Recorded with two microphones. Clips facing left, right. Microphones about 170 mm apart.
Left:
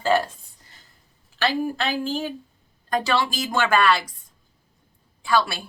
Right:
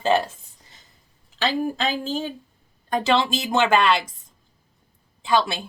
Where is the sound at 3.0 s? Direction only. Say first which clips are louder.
Right 5 dB; 25° right (ahead or behind).